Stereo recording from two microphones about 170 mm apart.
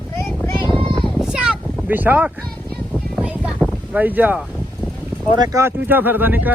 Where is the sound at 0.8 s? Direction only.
30° right (ahead or behind).